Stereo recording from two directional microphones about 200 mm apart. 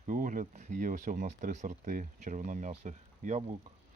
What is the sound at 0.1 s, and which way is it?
A man's voice, 40° right (ahead or behind).